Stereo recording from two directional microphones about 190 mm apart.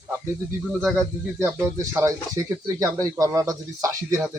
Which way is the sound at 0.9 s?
10° right (ahead or behind).